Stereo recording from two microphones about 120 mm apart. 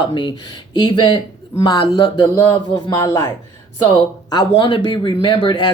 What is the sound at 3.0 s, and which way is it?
Speech, 25° left (ahead or behind).